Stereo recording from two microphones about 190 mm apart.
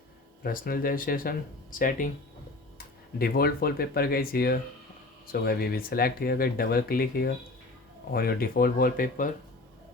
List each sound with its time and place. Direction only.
0.4 s speech: 50° left (ahead or behind)